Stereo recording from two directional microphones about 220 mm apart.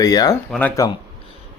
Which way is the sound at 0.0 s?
15° left (ahead or behind).